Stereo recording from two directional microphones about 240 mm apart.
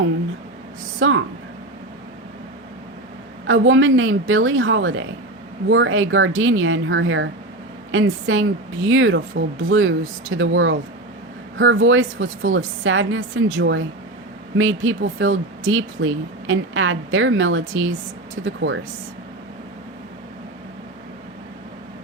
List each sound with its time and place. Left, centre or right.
0.9 s speech: right
3.4 s a woman's voice: right